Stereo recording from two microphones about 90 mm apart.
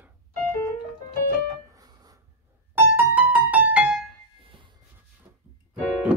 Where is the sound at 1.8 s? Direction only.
45° right (ahead or behind).